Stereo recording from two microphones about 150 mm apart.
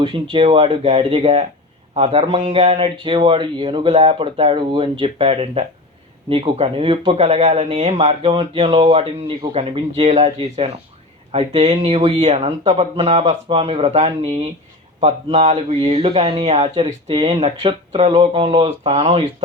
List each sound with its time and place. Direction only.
0.0 s speech: 35° right (ahead or behind)
7.2 s speech: 45° right (ahead or behind)